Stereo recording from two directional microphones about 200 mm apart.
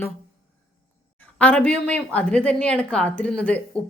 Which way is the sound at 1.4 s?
5° left (ahead or behind).